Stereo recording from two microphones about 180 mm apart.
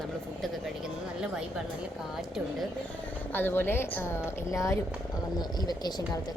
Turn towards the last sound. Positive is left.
turn(degrees=25)  # may be behind; listen again after turning